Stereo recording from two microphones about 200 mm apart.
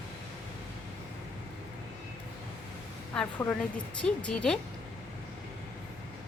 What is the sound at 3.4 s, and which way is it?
A woman's voice, 5° left (ahead or behind).